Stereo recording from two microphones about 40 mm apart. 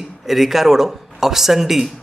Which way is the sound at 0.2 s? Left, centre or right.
Centre.